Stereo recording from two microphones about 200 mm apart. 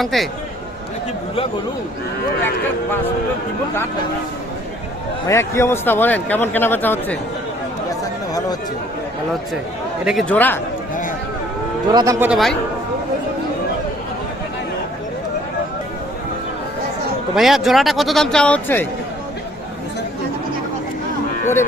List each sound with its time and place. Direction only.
0.0 s a man's voice: centre (ahead or behind)
5.3 s speech: 15° left (ahead or behind)
7.9 s chatter: 20° left (ahead or behind)
10.1 s speech: 5° left (ahead or behind)
11.9 s speech: 20° right (ahead or behind)
12.3 s a man's voice: centre (ahead or behind)
17.3 s a man's voice: centre (ahead or behind)
21.4 s speech: 10° left (ahead or behind)